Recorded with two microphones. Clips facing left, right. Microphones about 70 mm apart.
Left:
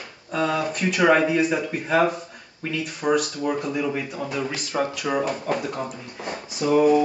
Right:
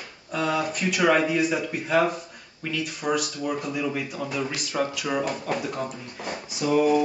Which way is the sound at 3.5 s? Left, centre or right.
Centre.